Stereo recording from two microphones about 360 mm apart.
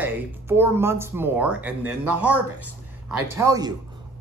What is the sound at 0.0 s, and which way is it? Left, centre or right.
Speech, centre.